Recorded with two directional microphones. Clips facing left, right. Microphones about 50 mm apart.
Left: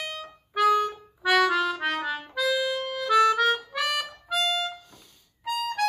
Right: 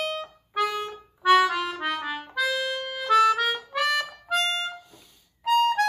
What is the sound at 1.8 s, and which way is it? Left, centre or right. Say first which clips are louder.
Music: left 1 dB; centre.